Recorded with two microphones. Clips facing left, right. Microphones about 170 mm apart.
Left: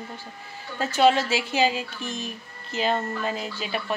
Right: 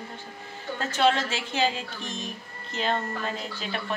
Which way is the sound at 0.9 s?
10° left (ahead or behind).